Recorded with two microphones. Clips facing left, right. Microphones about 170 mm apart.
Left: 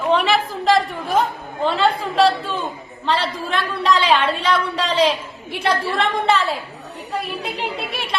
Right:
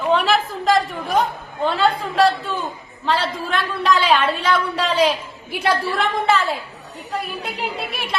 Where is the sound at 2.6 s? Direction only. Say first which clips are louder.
Even; centre (ahead or behind).